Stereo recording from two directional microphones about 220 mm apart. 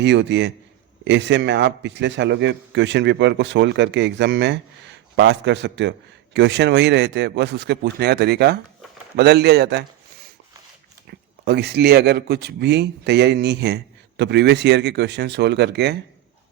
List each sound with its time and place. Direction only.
0.0 s a man's voice: 55° right (ahead or behind)
11.4 s a man's voice: 50° right (ahead or behind)